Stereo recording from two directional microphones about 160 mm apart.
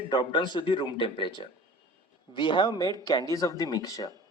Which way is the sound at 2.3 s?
30° left (ahead or behind).